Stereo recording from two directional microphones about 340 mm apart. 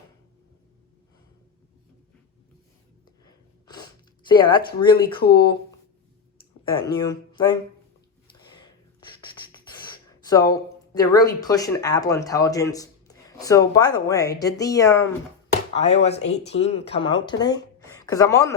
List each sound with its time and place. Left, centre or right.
3.2 s a sound: centre
4.3 s speech: centre
6.8 s speech: centre
9.0 s speech: centre